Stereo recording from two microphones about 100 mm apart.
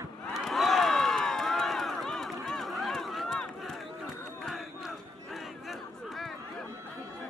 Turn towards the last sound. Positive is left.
turn(degrees=0)  # may be behind; listen again after turning